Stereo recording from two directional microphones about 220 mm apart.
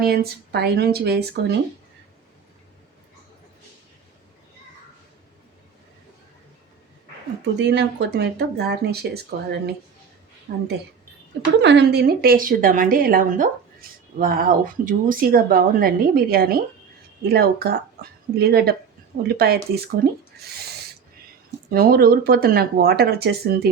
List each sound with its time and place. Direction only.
0.0 s speech: 45° right (ahead or behind)
7.6 s speech: 55° right (ahead or behind); by 10.6 s 35° right (ahead or behind)
11.6 s speech: 50° right (ahead or behind)
21.7 s speech: 45° right (ahead or behind)